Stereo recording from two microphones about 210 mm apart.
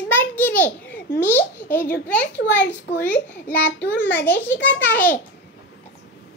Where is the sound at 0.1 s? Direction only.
10° left (ahead or behind).